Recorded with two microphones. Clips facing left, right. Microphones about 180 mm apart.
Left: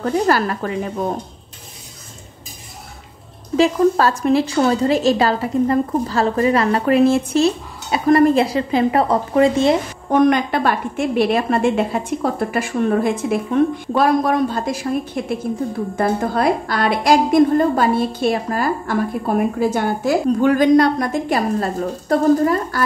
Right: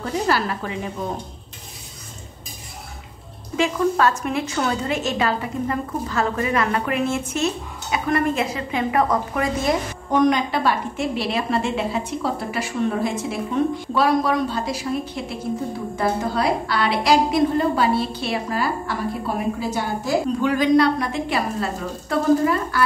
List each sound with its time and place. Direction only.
0.0 s a woman's voice: 45° left (ahead or behind)
3.5 s a woman's voice: 35° left (ahead or behind)
10.1 s a woman's voice: 55° left (ahead or behind)